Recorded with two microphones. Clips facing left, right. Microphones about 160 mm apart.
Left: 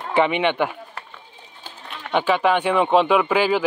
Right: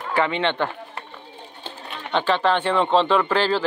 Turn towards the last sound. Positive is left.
turn(degrees=10)  # may be behind; listen again after turning